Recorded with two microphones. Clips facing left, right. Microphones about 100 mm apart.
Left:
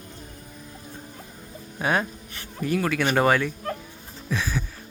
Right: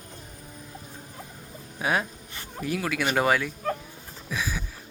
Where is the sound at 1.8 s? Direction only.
5° right (ahead or behind).